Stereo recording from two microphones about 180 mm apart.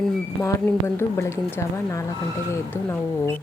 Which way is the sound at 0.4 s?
15° left (ahead or behind).